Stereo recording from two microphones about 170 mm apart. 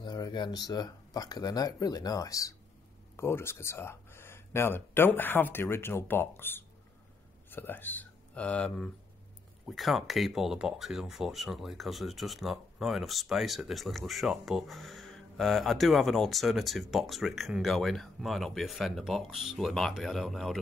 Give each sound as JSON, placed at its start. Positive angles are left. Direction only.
{"t": 0.0, "sound": "speech", "side_deg": 25}